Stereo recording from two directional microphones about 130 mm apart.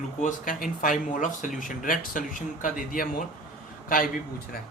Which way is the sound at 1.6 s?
90° left.